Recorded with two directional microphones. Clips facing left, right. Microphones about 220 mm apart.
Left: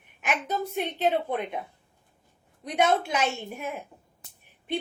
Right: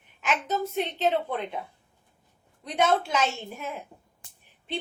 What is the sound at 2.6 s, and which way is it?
Speech, 15° left (ahead or behind).